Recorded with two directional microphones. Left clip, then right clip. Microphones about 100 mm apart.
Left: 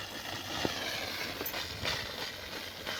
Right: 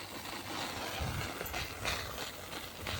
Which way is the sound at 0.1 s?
35° left (ahead or behind).